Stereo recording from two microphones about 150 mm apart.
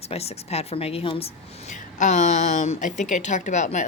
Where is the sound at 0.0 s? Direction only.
45° left (ahead or behind).